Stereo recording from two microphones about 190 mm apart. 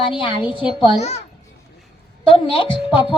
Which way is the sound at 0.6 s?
Centre (ahead or behind).